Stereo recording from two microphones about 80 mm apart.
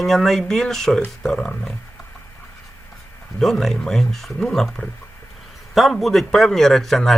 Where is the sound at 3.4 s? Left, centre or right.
Centre.